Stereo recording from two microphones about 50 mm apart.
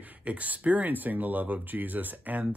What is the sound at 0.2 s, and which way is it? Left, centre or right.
Speech, right.